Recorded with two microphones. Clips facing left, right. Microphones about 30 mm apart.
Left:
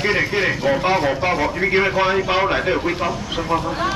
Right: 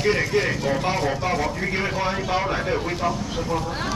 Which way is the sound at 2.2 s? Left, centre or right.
Left.